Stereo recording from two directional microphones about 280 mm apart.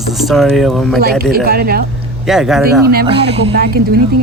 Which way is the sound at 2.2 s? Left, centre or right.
Centre.